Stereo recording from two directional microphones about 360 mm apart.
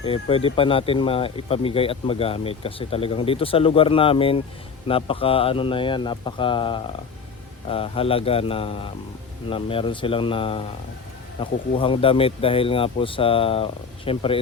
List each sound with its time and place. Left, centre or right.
0.0 s speech: centre